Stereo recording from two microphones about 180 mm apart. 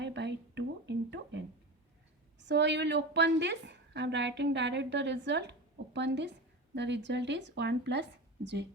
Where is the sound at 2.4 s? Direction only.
75° right (ahead or behind).